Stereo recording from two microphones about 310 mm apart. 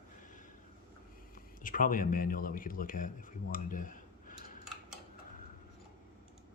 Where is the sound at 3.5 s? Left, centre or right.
Left.